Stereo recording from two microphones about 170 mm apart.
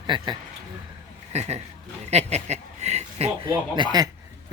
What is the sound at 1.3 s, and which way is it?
Speech, 40° right (ahead or behind).